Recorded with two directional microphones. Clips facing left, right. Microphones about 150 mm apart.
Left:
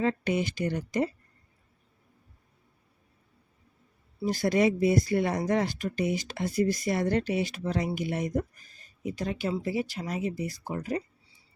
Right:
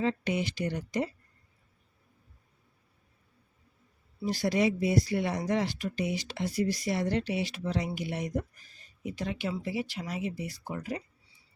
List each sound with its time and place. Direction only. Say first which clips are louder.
0.0 s speech: left 2 dB; 50° left (ahead or behind)
4.3 s speech: left 3 dB; 50° left (ahead or behind)